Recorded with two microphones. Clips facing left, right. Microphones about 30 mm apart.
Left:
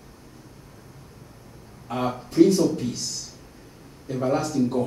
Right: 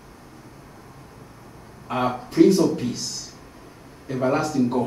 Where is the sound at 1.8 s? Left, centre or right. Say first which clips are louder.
Right 3 dB; centre.